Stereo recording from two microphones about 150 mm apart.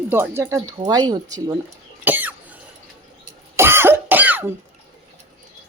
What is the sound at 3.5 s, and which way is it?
Throat clearing, 15° right (ahead or behind).